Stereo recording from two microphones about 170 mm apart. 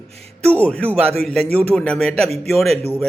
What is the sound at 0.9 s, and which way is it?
Speech, 35° right (ahead or behind).